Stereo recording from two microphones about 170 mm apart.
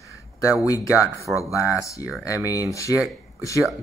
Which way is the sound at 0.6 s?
20° left (ahead or behind).